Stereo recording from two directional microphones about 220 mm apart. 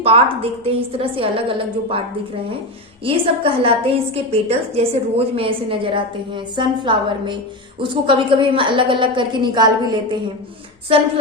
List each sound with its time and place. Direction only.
0.0 s a woman's voice: 25° right (ahead or behind)
3.0 s a woman's voice: 25° right (ahead or behind)